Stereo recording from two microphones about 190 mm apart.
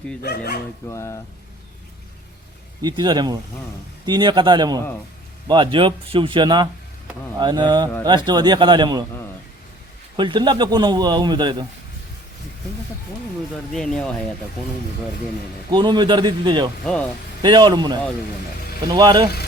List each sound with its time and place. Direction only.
0.2 s speech: 55° left (ahead or behind)
0.9 s speech: 15° left (ahead or behind)
2.8 s a man's voice: 25° right (ahead or behind)
10.2 s a man's voice: 25° right (ahead or behind)
13.7 s speech: 5° left (ahead or behind)
15.7 s a man's voice: 25° right (ahead or behind)
16.8 s speech: 5° left (ahead or behind)
17.4 s a man's voice: 25° right (ahead or behind)